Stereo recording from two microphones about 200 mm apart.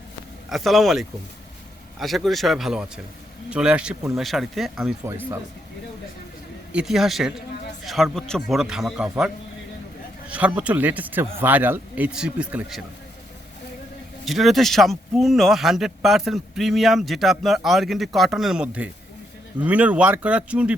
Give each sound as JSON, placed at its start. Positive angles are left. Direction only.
{"t": 0.5, "sound": "a man's voice", "side_deg": 0}
{"t": 6.7, "sound": "a man's voice", "side_deg": 0}
{"t": 14.3, "sound": "a man's voice", "side_deg": 0}